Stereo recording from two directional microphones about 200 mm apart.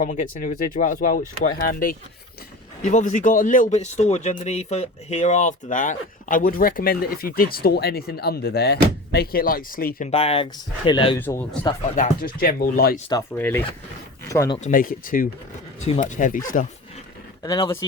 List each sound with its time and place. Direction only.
0.0 s speech: 40° left (ahead or behind)
10.1 s speech: 30° left (ahead or behind)
11.2 s speech: 10° left (ahead or behind)
11.9 s speech: 45° left (ahead or behind)
13.1 s speech: 15° left (ahead or behind)
14.7 s speech: 40° left (ahead or behind)
17.4 s speech: 20° left (ahead or behind)